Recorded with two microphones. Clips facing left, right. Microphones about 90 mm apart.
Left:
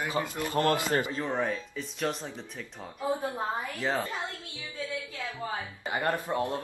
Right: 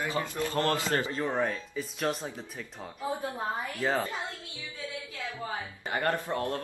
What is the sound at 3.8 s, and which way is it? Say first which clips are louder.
Speech: right 2 dB; 5° right (ahead or behind).